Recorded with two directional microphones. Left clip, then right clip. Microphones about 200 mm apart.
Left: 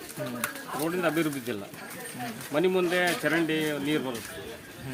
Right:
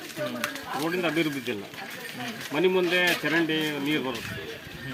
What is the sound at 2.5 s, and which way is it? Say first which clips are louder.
Speech: right 2 dB; 15° left (ahead or behind).